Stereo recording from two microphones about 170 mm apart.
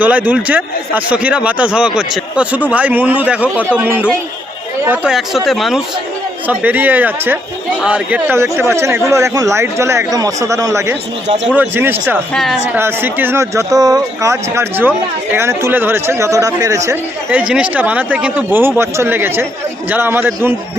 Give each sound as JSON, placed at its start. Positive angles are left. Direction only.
{"t": 0.0, "sound": "speech", "side_deg": -10}
{"t": 12.3, "sound": "speech", "side_deg": 0}
{"t": 12.7, "sound": "speech", "side_deg": -10}